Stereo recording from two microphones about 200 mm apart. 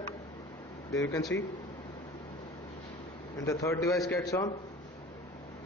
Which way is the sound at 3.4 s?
15° left (ahead or behind).